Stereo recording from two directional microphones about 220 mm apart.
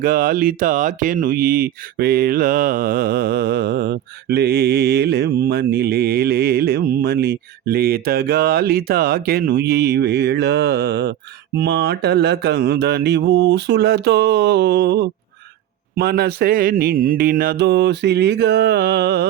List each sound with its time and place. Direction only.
0.0 s speech: 40° right (ahead or behind)